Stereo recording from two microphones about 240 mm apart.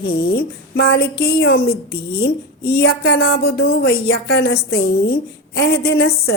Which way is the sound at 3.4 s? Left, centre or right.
Left.